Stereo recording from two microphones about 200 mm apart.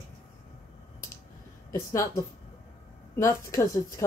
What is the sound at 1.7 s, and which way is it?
Speech, 15° left (ahead or behind).